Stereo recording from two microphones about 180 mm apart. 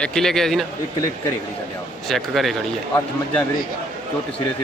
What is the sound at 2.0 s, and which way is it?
Speech, centre (ahead or behind).